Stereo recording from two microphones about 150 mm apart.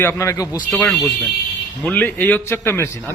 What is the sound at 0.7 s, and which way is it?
A man's voice, centre (ahead or behind).